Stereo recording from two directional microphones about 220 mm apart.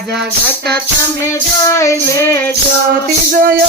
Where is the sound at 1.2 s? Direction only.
15° left (ahead or behind).